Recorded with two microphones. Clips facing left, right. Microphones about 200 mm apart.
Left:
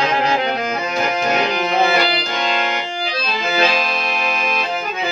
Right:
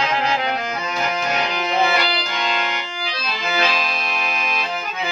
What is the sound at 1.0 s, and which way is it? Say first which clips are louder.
Accordion: left 4 dB; 55° left (ahead or behind).